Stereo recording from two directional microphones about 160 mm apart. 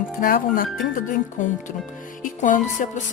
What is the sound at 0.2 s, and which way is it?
Music, 60° left (ahead or behind).